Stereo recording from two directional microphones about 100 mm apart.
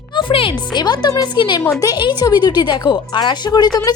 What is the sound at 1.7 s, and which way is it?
Speech, 40° left (ahead or behind).